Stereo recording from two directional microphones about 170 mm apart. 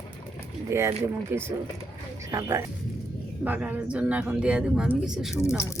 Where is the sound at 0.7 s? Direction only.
15° right (ahead or behind).